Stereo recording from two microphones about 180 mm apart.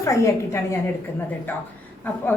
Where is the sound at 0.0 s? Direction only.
15° left (ahead or behind).